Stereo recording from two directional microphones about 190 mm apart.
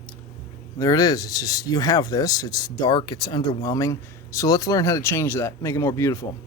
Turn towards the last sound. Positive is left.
turn(degrees=15)  # may be behind; listen again after turning